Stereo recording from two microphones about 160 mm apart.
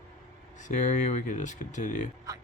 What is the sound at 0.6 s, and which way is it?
Speech, 50° left (ahead or behind).